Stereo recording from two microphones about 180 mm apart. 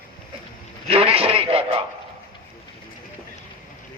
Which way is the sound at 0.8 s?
30° right (ahead or behind).